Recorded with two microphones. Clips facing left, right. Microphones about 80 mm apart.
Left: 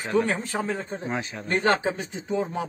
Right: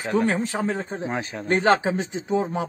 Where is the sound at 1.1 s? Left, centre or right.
Right.